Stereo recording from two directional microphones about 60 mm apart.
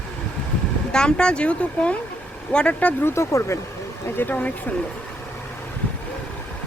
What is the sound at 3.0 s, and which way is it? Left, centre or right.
Speech, left.